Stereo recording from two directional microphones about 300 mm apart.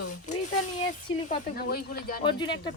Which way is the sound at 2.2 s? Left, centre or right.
Centre.